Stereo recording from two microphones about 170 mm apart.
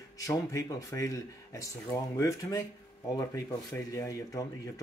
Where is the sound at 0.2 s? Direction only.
20° left (ahead or behind).